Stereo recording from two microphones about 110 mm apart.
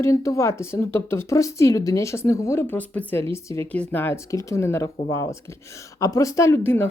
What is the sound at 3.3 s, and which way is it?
Speech, 25° left (ahead or behind).